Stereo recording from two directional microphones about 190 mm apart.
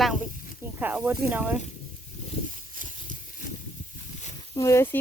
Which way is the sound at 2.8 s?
45° right (ahead or behind).